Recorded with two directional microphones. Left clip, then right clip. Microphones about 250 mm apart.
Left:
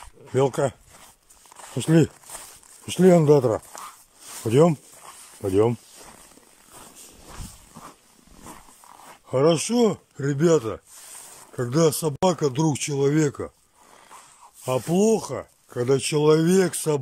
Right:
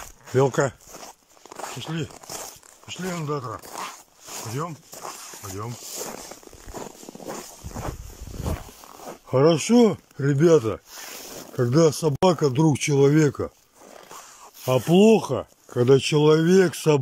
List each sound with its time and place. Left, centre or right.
0.3 s speech: centre
1.8 s speech: left
9.3 s speech: centre
14.9 s speech: centre